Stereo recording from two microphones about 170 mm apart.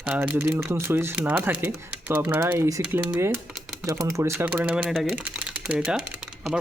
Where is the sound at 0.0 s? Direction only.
10° right (ahead or behind).